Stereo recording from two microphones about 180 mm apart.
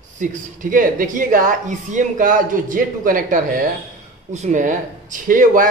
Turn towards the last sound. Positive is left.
turn(degrees=-50)  # may be behind; listen again after turning